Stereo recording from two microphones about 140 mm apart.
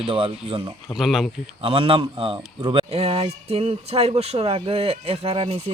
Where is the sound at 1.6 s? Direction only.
40° right (ahead or behind).